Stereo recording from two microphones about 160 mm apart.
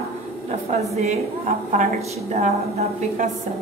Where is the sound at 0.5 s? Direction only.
40° right (ahead or behind).